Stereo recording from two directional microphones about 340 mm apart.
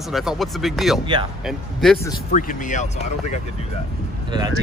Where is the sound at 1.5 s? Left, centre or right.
Centre.